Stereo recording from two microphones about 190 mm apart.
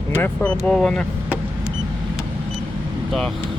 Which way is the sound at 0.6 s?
5° left (ahead or behind).